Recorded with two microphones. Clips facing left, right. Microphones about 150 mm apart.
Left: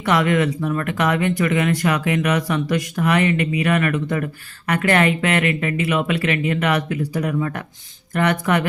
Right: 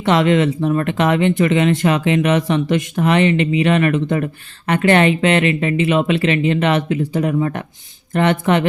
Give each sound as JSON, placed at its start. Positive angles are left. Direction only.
{"t": 0.0, "sound": "speech", "side_deg": -25}